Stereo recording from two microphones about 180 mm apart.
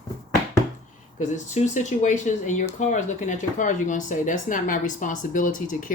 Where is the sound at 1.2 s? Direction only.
40° left (ahead or behind).